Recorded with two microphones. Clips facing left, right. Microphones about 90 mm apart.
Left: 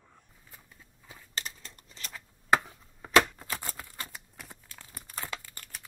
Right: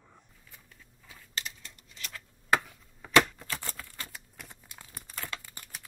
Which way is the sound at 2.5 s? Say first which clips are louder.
Left 2 dB; 25° left (ahead or behind).